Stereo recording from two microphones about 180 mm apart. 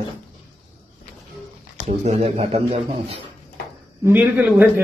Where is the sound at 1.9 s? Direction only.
40° right (ahead or behind).